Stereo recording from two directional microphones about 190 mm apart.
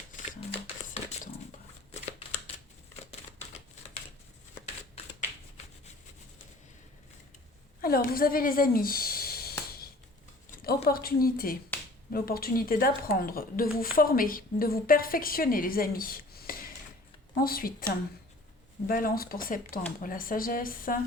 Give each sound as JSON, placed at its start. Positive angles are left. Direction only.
{"t": 7.8, "sound": "speech", "side_deg": 50}
{"t": 10.5, "sound": "a sound", "side_deg": 50}
{"t": 10.8, "sound": "a woman's voice", "side_deg": 50}
{"t": 11.7, "sound": "finger snapping", "side_deg": 10}
{"t": 12.1, "sound": "a woman's voice", "side_deg": 50}